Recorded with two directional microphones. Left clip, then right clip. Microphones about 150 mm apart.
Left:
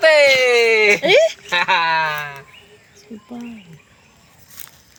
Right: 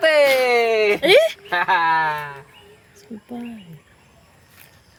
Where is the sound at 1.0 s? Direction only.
25° right (ahead or behind).